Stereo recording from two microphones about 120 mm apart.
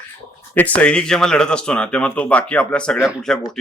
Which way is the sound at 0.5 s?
15° left (ahead or behind).